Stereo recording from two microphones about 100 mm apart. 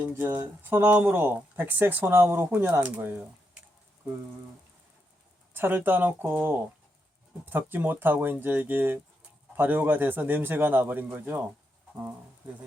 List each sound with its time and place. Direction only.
0.3 s speech: 25° right (ahead or behind)
0.8 s speech: 15° right (ahead or behind)
5.5 s speech: 20° right (ahead or behind)